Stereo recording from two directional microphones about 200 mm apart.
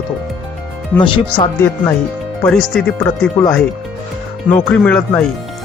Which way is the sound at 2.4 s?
5° left (ahead or behind).